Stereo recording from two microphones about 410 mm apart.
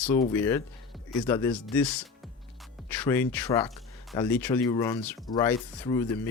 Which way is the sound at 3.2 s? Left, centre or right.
Centre.